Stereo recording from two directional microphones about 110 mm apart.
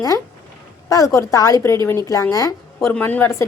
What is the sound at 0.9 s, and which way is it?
A woman's voice, 30° left (ahead or behind).